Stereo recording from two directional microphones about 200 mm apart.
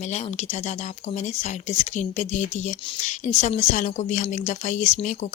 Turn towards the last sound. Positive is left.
turn(degrees=35)  # may be behind; listen again after turning